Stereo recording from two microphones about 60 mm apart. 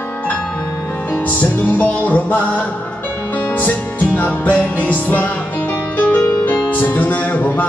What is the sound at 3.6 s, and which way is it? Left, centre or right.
Music, left.